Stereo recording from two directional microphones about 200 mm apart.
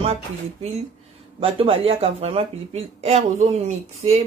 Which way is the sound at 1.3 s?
30° right (ahead or behind).